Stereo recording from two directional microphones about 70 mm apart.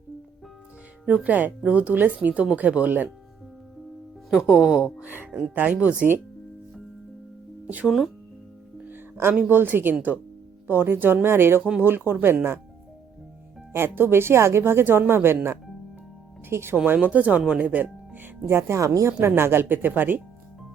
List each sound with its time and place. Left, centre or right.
1.0 s speech: centre
4.4 s speech: left
4.7 s speech: centre
7.6 s speech: right
7.9 s speech: centre
8.9 s music: right
9.5 s a woman's voice: right
13.7 s a woman's voice: right
16.5 s speech: right
16.8 s speech: right
18.4 s a woman's voice: right